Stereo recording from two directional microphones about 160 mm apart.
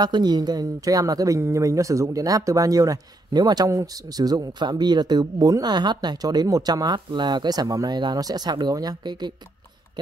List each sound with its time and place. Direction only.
0.0 s speech: 25° right (ahead or behind)